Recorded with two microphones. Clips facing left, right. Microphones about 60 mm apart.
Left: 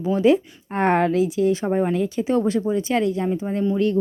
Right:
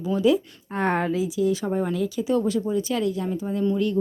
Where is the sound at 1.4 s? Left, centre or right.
Left.